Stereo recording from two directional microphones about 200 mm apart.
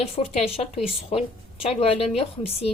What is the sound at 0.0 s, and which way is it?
A woman's voice, 30° left (ahead or behind).